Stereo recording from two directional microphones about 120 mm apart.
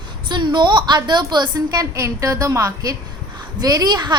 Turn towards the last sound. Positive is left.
turn(degrees=-35)  # may be behind; listen again after turning